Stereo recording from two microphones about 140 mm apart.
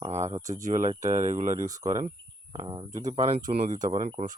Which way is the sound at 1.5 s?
25° right (ahead or behind).